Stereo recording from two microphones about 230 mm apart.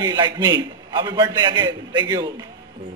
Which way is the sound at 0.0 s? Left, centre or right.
Centre.